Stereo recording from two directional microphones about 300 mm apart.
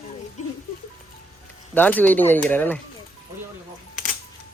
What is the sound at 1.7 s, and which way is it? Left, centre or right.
Speech, centre.